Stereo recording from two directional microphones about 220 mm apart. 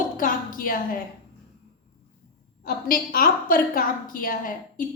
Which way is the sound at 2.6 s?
40° left (ahead or behind).